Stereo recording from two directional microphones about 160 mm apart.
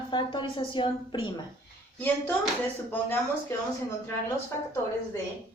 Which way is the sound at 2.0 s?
10° left (ahead or behind).